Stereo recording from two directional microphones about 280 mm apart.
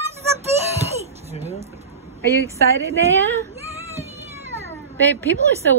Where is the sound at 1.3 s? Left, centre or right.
Right.